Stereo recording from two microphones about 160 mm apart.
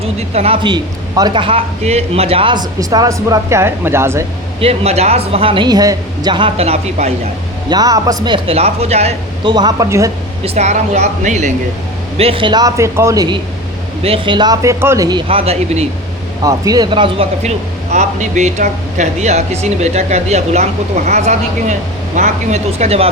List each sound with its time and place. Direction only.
0.2 s a man's voice: 40° right (ahead or behind); by 4.3 s 15° right (ahead or behind)
4.6 s a woman's voice: 40° right (ahead or behind)
7.7 s a man's voice: 25° right (ahead or behind); by 9.5 s 40° right (ahead or behind)
9.5 s a man's voice: 25° right (ahead or behind)
10.4 s speech: 40° right (ahead or behind)
12.1 s a man's voice: 35° right (ahead or behind)
15.3 s a woman's voice: 40° right (ahead or behind)
16.4 s a man's voice: 20° right (ahead or behind)
17.9 s speech: 45° right (ahead or behind)